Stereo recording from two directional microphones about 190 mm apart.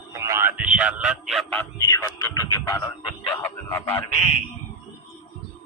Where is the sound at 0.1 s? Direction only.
15° right (ahead or behind); by 4.0 s 10° left (ahead or behind).